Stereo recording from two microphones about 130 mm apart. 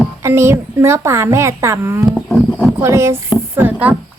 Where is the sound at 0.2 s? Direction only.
20° right (ahead or behind).